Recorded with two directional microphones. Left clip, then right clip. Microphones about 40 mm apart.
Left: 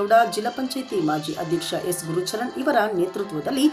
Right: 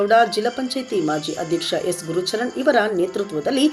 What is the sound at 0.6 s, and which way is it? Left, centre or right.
Speech, left.